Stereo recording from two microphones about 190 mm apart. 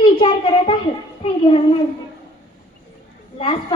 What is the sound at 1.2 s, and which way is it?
Speech, 30° left (ahead or behind).